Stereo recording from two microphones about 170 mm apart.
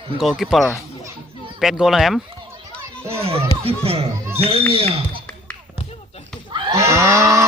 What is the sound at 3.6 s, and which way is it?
A child's voice, 35° right (ahead or behind).